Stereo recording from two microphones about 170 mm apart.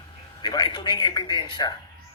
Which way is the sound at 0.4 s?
25° left (ahead or behind).